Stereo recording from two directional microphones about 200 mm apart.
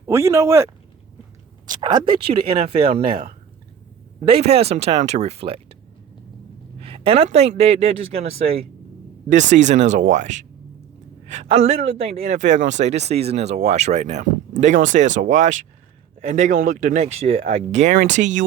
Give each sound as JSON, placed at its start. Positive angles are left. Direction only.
{"t": 0.0, "sound": "speech", "side_deg": -15}
{"t": 6.8, "sound": "a woman's voice", "side_deg": -25}